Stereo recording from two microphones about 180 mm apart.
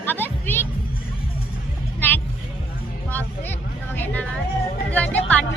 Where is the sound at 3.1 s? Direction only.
10° left (ahead or behind).